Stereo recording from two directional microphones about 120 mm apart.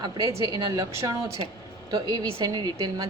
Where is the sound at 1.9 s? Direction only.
35° right (ahead or behind).